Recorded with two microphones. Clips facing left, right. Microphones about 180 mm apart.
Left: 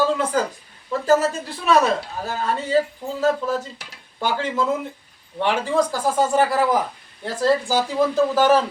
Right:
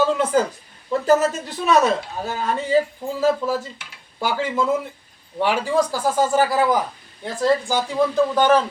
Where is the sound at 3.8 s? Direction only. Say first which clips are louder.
Left 2 dB; 40° left (ahead or behind).